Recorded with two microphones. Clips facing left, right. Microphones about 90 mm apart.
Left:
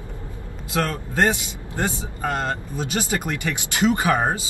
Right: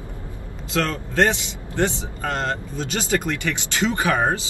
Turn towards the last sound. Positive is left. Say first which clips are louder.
# even
turn(degrees=20)  # may be behind; listen again after turning